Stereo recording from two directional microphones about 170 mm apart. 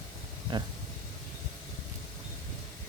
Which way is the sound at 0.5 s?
25° right (ahead or behind).